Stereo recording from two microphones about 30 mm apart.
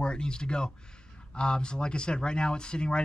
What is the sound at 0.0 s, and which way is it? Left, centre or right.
Speech, left.